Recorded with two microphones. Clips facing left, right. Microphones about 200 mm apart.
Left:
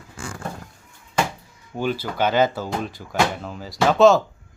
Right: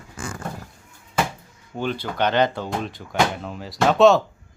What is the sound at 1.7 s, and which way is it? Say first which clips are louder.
A man's voice: left 1 dB; 5° left (ahead or behind).